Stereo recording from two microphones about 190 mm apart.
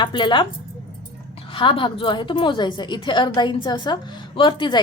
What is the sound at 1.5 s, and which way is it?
A woman's voice, 25° left (ahead or behind).